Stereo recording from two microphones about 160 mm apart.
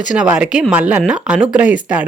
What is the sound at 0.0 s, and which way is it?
Speech, 5° right (ahead or behind).